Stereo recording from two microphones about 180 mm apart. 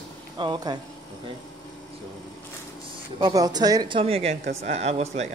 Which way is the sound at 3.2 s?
20° right (ahead or behind).